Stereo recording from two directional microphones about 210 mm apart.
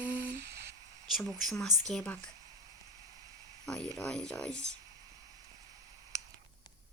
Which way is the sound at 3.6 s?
Centre (ahead or behind).